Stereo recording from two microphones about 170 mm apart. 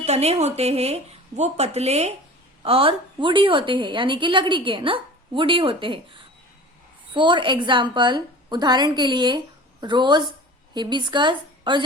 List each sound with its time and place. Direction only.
0.0 s a woman's voice: 40° right (ahead or behind)